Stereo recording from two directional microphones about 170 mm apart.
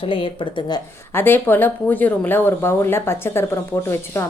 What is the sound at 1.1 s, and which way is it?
Speech, 10° left (ahead or behind).